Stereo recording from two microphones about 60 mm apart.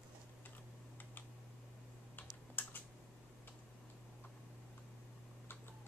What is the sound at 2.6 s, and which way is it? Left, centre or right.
Typing, left.